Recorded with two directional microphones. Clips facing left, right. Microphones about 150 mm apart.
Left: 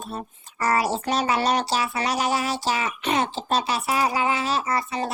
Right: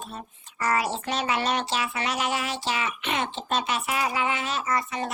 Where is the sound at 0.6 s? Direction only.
40° left (ahead or behind).